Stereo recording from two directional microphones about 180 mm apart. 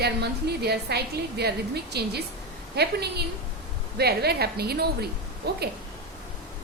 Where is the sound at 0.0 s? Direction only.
65° right (ahead or behind).